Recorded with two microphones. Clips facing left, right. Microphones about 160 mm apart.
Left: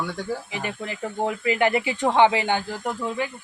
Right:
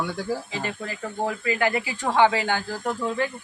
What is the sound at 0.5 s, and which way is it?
Speech, 15° left (ahead or behind).